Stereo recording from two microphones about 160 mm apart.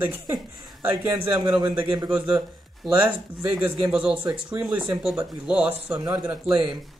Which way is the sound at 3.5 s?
5° right (ahead or behind).